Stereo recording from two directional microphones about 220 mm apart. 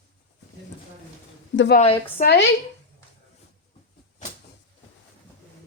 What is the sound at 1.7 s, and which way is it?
Speech, 25° left (ahead or behind).